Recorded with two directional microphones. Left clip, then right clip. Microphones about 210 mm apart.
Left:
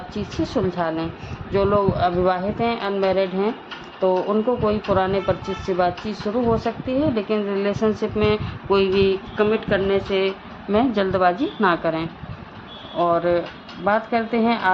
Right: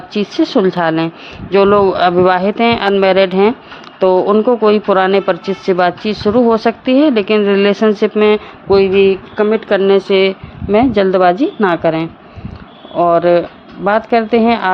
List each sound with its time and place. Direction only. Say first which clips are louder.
0.1 s speech: right 12 dB; 35° right (ahead or behind)
9.5 s speech: right 11 dB; 45° right (ahead or behind)
10.7 s speech: right 9 dB; 35° right (ahead or behind)